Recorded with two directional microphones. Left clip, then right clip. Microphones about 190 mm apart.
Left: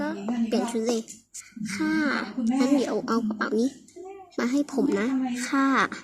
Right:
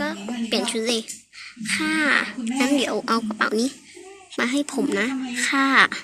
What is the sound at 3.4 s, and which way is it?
A woman's voice, 5° left (ahead or behind).